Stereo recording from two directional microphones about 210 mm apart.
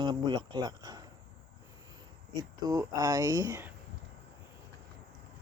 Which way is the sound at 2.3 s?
15° right (ahead or behind).